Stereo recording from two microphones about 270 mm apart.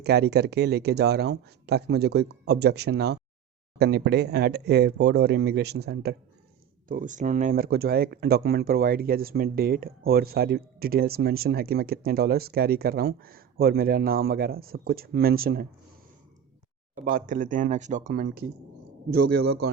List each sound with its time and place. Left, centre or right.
0.0 s speech: right
17.0 s speech: right
19.1 s a man's voice: right